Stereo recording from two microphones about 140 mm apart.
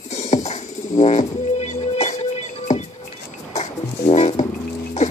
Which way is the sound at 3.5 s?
50° left (ahead or behind).